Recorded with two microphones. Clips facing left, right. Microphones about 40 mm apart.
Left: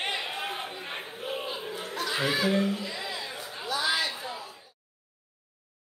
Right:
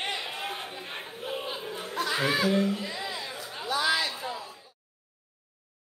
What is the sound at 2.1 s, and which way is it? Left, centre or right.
Speech, centre.